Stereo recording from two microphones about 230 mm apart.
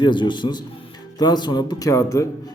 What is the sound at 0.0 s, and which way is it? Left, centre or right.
A man's voice, centre.